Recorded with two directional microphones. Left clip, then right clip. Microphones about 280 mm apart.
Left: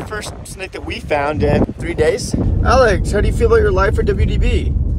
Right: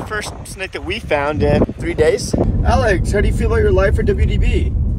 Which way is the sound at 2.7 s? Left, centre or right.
Left.